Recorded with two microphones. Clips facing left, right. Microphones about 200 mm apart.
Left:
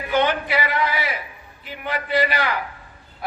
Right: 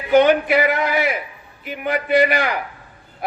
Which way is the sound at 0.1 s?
50° right (ahead or behind).